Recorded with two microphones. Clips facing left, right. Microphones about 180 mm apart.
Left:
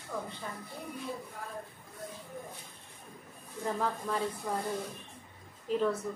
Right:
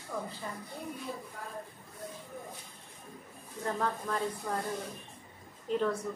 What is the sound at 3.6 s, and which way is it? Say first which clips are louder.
Speech: even; 5° left (ahead or behind).